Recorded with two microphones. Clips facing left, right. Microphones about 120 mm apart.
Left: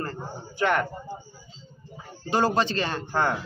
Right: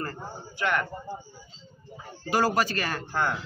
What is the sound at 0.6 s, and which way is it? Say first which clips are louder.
Speech: left 4 dB; 40° left (ahead or behind).